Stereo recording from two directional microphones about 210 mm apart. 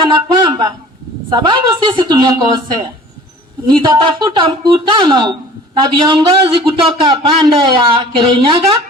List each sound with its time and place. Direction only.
0.0 s a sound: 20° right (ahead or behind)
1.3 s speech: 20° right (ahead or behind)
3.7 s speech: 20° right (ahead or behind)